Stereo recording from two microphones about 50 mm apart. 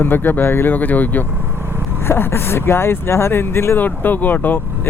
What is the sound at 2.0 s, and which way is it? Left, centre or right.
Speech, left.